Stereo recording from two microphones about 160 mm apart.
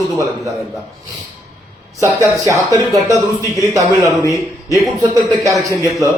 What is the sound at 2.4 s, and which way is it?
Speech, 20° right (ahead or behind).